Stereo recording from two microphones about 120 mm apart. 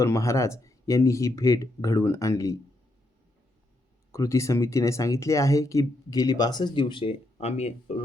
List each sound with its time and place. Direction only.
0.0 s speech: 25° left (ahead or behind)
4.1 s speech: 25° left (ahead or behind); by 8.0 s 60° left (ahead or behind)